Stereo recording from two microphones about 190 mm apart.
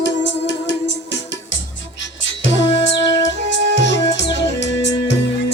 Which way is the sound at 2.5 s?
70° left (ahead or behind).